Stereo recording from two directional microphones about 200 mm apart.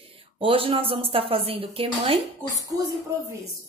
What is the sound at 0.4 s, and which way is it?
A woman's voice, 25° right (ahead or behind).